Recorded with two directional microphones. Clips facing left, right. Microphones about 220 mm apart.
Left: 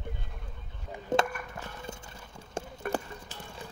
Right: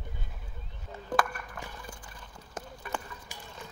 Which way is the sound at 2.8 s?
55° left (ahead or behind).